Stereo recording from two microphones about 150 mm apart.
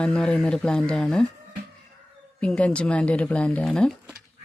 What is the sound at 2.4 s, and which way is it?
Speech, 10° left (ahead or behind).